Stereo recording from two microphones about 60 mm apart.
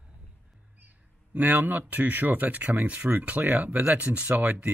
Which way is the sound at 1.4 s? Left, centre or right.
Right.